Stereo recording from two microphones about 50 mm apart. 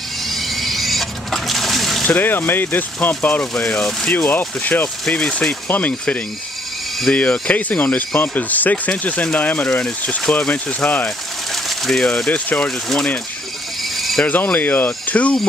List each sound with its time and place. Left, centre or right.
0.2 s water: centre
2.0 s speech: left
5.1 s speech: left
11.1 s a sound: centre
12.3 s speech: left
13.9 s mechanisms: centre
14.2 s speech: left
15.0 s speech: left